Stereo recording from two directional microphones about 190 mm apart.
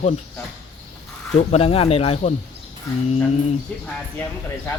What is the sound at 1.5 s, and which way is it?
Speech, 30° left (ahead or behind).